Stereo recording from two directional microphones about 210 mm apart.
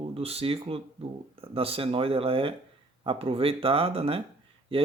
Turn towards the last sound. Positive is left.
turn(degrees=-25)  # may be behind; listen again after turning